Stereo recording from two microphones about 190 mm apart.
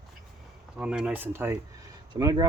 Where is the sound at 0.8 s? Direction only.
5° right (ahead or behind); by 2.5 s 20° right (ahead or behind).